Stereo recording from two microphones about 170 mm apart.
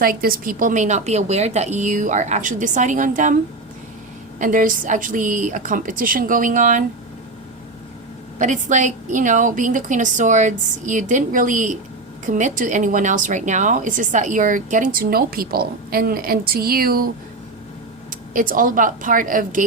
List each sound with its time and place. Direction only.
0.0 s a woman's voice: 60° right (ahead or behind)
4.4 s a woman's voice: 50° right (ahead or behind)
8.4 s a woman's voice: 45° right (ahead or behind)
18.3 s a woman's voice: 55° right (ahead or behind)